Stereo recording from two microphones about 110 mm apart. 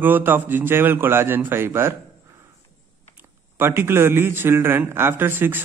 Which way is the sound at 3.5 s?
20° right (ahead or behind).